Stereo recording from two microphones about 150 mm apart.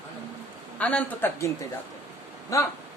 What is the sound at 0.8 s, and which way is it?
Speech, 10° left (ahead or behind).